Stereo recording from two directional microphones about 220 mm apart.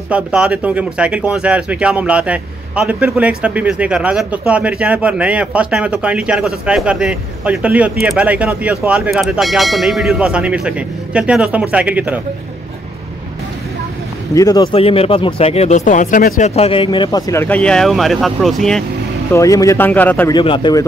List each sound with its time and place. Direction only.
0.1 s speech: 5° right (ahead or behind)
14.3 s speech: 15° left (ahead or behind)
19.3 s a man's voice: 15° left (ahead or behind)
20.3 s speech: 20° left (ahead or behind)